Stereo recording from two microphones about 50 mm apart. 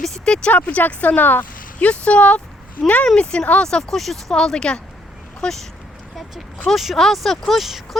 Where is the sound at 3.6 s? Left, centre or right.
Centre.